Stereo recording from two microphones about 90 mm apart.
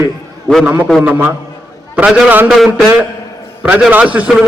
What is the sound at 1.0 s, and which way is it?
A man's voice, 20° right (ahead or behind).